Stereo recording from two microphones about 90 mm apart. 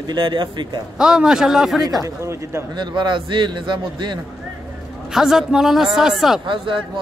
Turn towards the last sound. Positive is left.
turn(degrees=-65)  # may be behind; listen again after turning